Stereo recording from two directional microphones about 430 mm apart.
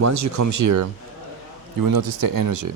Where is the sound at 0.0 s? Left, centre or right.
Right.